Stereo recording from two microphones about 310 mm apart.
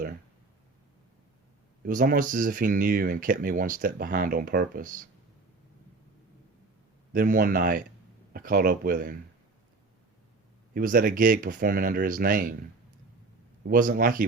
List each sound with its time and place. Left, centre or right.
1.8 s speech: right
7.1 s speech: right
10.8 s speech: right
13.7 s speech: right